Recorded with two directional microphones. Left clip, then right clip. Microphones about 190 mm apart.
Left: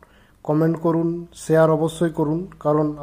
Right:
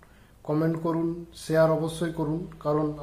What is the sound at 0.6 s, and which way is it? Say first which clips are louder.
A man's voice: left 7 dB; 30° left (ahead or behind).